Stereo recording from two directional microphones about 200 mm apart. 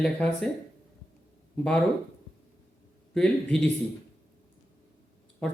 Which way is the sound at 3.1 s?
5° left (ahead or behind).